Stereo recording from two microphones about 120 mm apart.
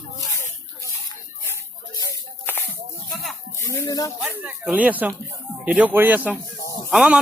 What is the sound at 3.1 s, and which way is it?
Music, centre (ahead or behind).